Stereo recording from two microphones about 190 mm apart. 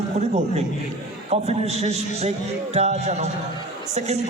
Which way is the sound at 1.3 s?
35° right (ahead or behind).